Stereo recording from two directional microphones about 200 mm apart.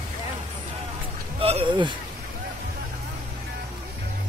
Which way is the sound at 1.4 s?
30° right (ahead or behind).